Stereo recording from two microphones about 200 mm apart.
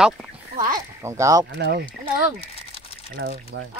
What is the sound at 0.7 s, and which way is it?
Speech, 15° right (ahead or behind).